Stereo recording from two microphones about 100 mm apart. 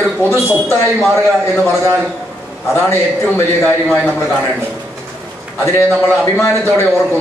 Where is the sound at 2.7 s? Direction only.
25° left (ahead or behind).